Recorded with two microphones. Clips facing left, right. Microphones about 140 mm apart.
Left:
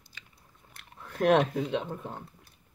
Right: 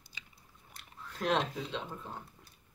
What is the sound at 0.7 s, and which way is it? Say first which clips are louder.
Speech: left 3 dB; 55° left (ahead or behind).